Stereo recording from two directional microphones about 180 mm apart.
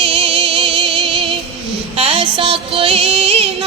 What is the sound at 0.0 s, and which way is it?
Music, 30° right (ahead or behind).